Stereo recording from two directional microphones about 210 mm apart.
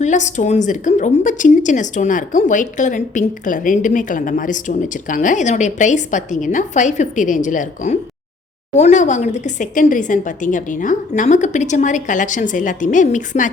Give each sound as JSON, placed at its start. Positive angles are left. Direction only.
{"t": 0.0, "sound": "a woman's voice", "side_deg": 35}